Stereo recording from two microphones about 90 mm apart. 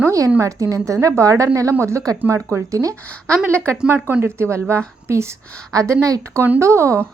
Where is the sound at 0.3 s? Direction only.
35° right (ahead or behind).